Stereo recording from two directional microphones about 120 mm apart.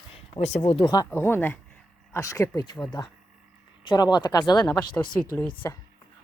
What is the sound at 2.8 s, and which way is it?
Speech, 40° left (ahead or behind).